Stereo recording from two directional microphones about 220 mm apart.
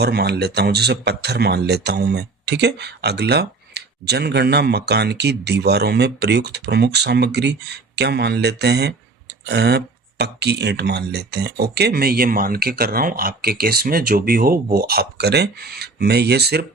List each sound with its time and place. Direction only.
0.0 s speech: 50° right (ahead or behind)